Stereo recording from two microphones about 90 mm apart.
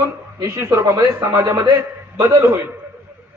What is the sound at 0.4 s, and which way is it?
Speech, 30° right (ahead or behind).